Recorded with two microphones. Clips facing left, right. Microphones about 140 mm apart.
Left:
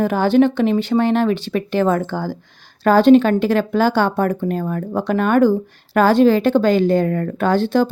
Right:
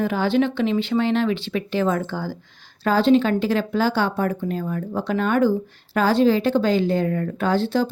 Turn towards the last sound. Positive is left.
turn(degrees=50)  # may be behind; listen again after turning